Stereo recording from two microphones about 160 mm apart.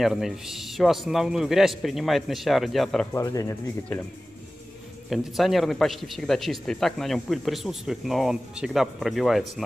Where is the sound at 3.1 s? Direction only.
20° left (ahead or behind).